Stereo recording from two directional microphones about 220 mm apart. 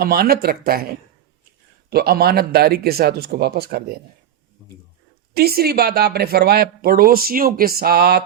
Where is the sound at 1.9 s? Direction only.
45° right (ahead or behind).